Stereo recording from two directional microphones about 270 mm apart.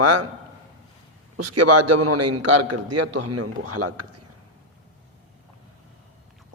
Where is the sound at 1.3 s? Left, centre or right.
Right.